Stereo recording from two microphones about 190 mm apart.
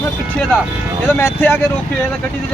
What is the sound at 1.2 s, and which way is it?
Speech, 10° left (ahead or behind).